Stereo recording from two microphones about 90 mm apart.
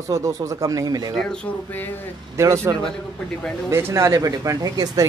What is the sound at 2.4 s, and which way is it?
Speech, 35° right (ahead or behind).